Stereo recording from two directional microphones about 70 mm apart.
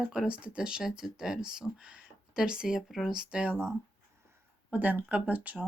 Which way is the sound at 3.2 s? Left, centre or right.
Centre.